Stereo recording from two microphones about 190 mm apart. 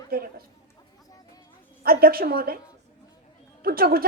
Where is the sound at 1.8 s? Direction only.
50° right (ahead or behind).